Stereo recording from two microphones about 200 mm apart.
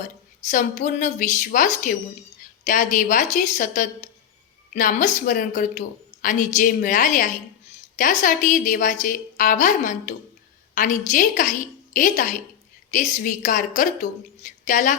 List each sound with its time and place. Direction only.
0.5 s a woman's voice: 40° left (ahead or behind)